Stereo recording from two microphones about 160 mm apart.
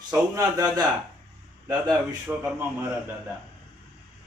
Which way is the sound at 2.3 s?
5° right (ahead or behind).